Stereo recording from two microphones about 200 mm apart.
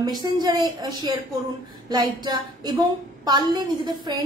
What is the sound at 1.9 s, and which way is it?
A woman's voice, 20° right (ahead or behind).